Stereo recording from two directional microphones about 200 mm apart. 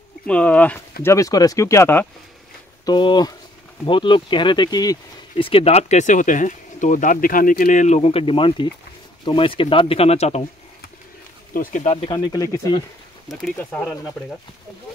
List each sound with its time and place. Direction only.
0.3 s speech: 5° left (ahead or behind); by 10.4 s 30° left (ahead or behind)
11.5 s speech: 45° left (ahead or behind); by 12.4 s 20° left (ahead or behind)
13.3 s speech: centre (ahead or behind)